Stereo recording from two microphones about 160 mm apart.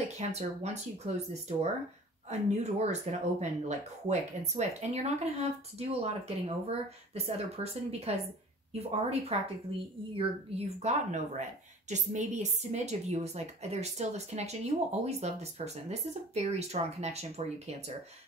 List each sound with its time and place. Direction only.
0.3 s a woman's voice: 45° right (ahead or behind)
10.8 s a woman's voice: 45° right (ahead or behind)